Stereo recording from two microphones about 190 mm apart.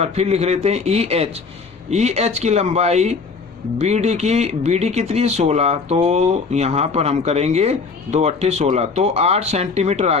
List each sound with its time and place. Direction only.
0.0 s speech: 35° right (ahead or behind)